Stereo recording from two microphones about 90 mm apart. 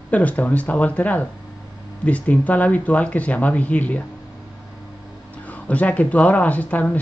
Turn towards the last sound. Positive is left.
turn(degrees=15)  # may be behind; listen again after turning